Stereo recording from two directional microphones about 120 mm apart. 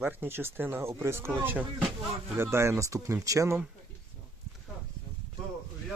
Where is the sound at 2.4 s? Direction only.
20° right (ahead or behind).